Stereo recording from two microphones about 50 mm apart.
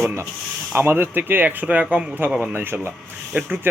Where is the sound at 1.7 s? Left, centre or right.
Right.